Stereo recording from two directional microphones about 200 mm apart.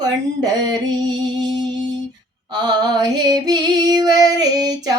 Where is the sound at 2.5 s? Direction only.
20° right (ahead or behind).